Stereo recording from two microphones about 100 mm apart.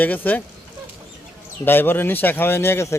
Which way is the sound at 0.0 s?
15° left (ahead or behind).